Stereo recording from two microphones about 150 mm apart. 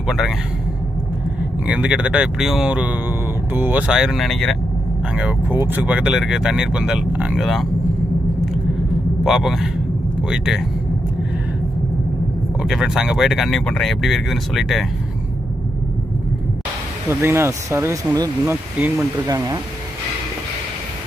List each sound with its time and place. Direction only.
0.0 s a man's voice: 5° right (ahead or behind)
1.4 s speech: 5° right (ahead or behind)
5.1 s speech: 10° right (ahead or behind)
9.2 s speech: 5° right (ahead or behind)
12.5 s speech: 5° right (ahead or behind)
17.1 s speech: 15° right (ahead or behind)
18.4 s speech: 10° right (ahead or behind)
19.2 s speech: 20° right (ahead or behind)